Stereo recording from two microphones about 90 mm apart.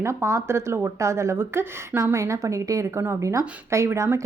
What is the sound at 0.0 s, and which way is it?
Speech, 35° right (ahead or behind).